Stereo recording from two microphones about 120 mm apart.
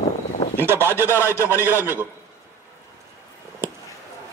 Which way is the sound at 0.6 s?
20° right (ahead or behind).